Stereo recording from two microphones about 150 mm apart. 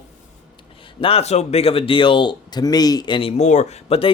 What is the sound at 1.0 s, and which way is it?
Speech, 40° left (ahead or behind).